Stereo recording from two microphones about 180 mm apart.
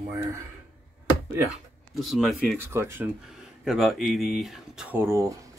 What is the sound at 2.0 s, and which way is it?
Speech, centre (ahead or behind).